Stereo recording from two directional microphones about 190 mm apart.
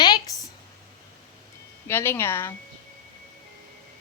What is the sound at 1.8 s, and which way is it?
Speech, 10° left (ahead or behind).